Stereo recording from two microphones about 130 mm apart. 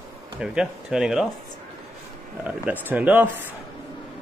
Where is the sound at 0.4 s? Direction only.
5° right (ahead or behind).